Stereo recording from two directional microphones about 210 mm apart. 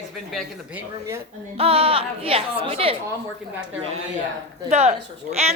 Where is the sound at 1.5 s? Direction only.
30° right (ahead or behind).